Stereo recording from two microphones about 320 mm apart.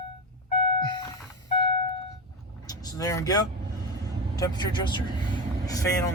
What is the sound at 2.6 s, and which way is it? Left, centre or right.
Speech, centre.